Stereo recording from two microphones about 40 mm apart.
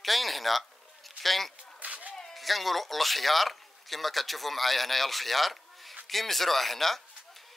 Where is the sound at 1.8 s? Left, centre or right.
Right.